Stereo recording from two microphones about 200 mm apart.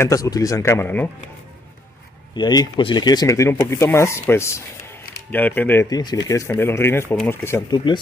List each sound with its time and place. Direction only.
0.0 s speech: 15° left (ahead or behind)
2.3 s speech: 20° left (ahead or behind)